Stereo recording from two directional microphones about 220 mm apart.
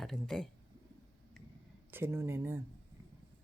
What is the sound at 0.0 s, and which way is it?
Speech, centre (ahead or behind).